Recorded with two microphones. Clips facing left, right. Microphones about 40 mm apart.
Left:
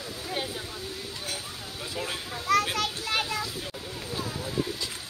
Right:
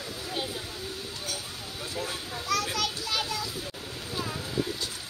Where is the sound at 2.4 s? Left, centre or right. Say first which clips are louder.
Left 4 dB; left.